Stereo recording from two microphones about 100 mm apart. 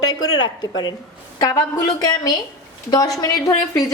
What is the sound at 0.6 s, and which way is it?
A woman's voice, 45° left (ahead or behind).